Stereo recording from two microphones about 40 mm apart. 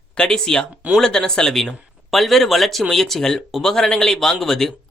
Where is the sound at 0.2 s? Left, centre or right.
Centre.